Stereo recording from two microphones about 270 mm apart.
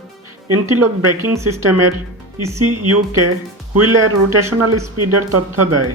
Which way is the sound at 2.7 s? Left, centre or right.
Right.